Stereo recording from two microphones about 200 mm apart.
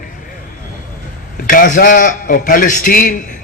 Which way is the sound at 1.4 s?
45° left (ahead or behind).